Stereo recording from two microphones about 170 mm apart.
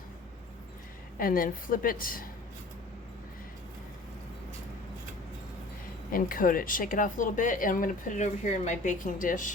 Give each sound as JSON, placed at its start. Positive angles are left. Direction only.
{"t": 1.2, "sound": "a woman's voice", "side_deg": 55}
{"t": 6.1, "sound": "speech", "side_deg": 55}